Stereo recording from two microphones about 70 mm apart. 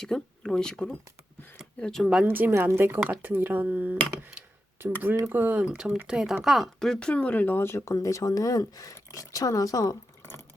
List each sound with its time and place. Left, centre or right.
0.0 s speech: centre
2.2 s a woman's voice: right
5.5 s speech: centre; by 7.9 s left
7.9 s speech: left